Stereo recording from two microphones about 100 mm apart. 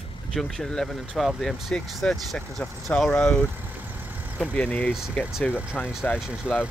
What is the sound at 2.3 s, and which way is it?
Speech, 10° left (ahead or behind).